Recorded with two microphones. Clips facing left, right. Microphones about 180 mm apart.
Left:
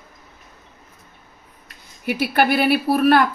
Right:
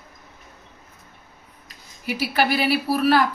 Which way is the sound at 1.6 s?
55° left (ahead or behind).